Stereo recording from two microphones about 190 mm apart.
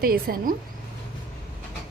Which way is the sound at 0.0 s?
50° right (ahead or behind).